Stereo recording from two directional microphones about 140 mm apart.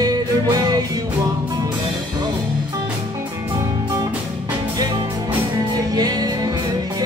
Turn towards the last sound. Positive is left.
turn(degrees=-25)  # may be behind; listen again after turning